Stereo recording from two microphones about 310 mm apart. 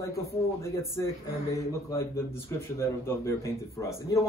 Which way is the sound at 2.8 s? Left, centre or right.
Centre.